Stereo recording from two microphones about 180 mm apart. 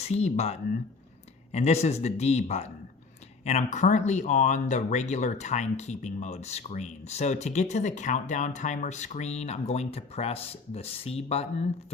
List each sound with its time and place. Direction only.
0.1 s speech: 40° left (ahead or behind)